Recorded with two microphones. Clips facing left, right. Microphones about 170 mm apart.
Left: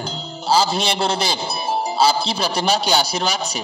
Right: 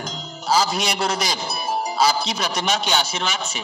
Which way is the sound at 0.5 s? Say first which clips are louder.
Left 2 dB; 30° left (ahead or behind).